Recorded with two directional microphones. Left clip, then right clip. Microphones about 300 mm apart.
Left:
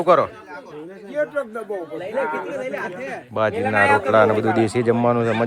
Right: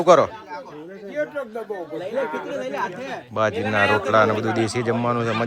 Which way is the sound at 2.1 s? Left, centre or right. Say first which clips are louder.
Left 3 dB; centre.